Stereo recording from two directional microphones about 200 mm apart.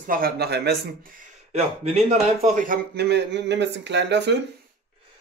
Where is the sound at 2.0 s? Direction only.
35° right (ahead or behind); by 4.4 s 60° right (ahead or behind).